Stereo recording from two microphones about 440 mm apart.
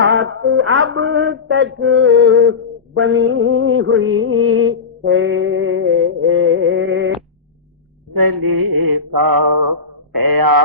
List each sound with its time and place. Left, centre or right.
0.0 s music: right
8.2 s mantra: right